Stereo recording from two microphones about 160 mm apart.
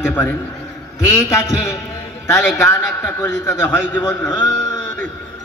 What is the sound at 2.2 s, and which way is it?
A man's voice, 15° left (ahead or behind).